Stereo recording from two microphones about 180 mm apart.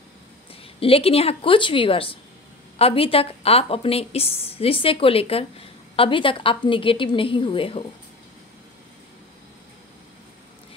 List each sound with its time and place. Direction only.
0.7 s a woman's voice: 30° left (ahead or behind)